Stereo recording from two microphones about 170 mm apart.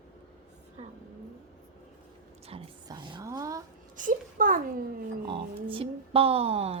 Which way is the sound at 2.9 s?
25° right (ahead or behind).